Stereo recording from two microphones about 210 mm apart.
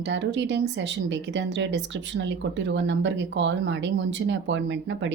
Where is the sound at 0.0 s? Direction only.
60° right (ahead or behind).